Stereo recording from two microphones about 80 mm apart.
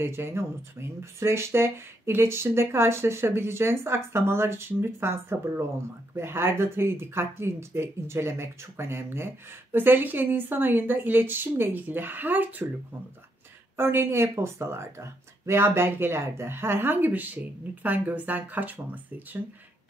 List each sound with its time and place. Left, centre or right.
0.0 s speech: right
13.7 s speech: right